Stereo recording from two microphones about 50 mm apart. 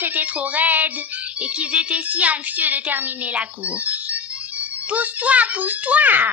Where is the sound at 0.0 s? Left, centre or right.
Right.